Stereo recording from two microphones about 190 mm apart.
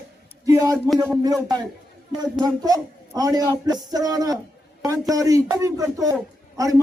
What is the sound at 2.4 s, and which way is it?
A man's voice, 20° right (ahead or behind).